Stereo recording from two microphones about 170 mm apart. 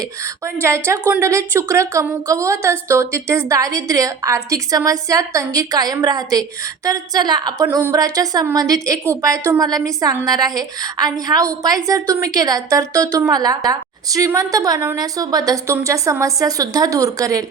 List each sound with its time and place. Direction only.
0.6 s a woman's voice: 15° right (ahead or behind)